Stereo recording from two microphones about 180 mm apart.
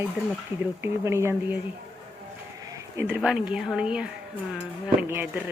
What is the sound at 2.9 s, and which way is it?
Speech, 10° right (ahead or behind).